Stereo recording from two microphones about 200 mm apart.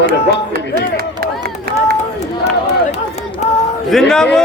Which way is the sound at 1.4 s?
50° right (ahead or behind).